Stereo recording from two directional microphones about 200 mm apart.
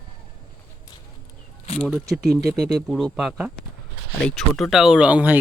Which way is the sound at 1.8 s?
Centre (ahead or behind).